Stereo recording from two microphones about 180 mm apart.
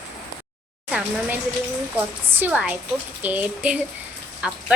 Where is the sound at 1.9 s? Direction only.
10° right (ahead or behind).